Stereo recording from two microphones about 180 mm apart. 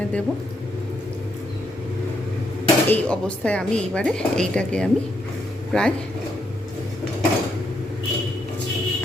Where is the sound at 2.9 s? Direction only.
5° left (ahead or behind).